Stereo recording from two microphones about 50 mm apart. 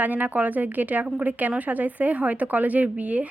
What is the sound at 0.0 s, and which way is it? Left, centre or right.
Speech, right.